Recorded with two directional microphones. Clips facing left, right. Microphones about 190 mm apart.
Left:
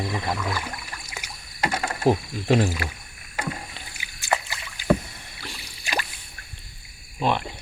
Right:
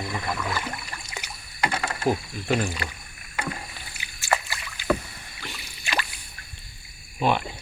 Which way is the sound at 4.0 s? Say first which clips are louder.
Even; 20° left (ahead or behind).